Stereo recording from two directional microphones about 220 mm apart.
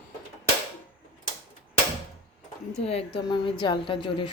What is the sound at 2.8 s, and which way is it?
A woman's voice, 25° left (ahead or behind).